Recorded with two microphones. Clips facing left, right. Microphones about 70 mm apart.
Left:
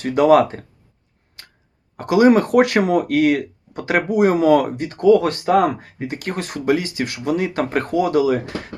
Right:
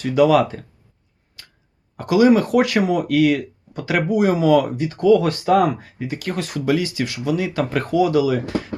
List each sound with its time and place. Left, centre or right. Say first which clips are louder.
0.0 s speech: left 2 dB; left
1.4 s a sound: left 1 dB; left
2.0 s speech: left 1 dB; left